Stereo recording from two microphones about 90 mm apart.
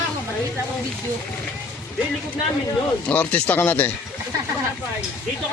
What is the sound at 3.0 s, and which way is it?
Speech, 15° left (ahead or behind).